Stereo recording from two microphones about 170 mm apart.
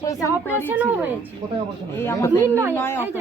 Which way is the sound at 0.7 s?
10° right (ahead or behind).